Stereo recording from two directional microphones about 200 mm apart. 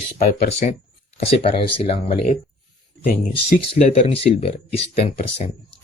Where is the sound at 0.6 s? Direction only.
40° left (ahead or behind).